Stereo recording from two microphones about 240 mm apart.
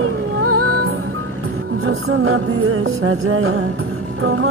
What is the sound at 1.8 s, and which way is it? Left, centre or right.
Music, right.